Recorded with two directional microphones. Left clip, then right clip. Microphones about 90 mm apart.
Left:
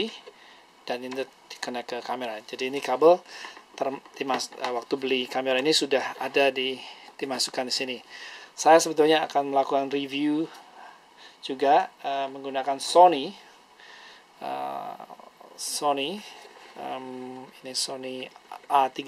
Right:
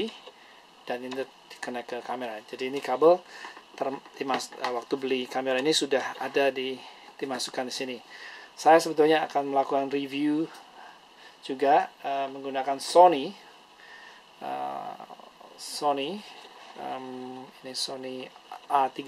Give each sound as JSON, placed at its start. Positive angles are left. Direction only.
{"t": 0.8, "sound": "speech", "side_deg": 20}
{"t": 14.4, "sound": "speech", "side_deg": 20}